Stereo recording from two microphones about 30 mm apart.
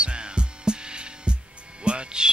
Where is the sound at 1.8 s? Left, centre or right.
Right.